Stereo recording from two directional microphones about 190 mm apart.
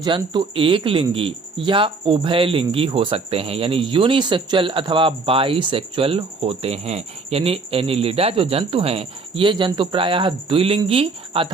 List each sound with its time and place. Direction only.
0.0 s speech: 25° right (ahead or behind)